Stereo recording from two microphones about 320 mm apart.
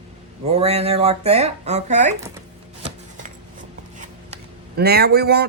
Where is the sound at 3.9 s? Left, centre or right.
Right.